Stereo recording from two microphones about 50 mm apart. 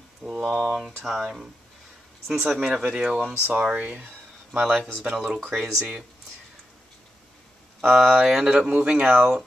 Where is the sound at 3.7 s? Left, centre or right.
Right.